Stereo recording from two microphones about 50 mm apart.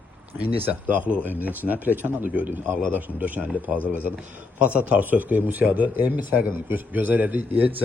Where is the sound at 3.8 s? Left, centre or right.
Left.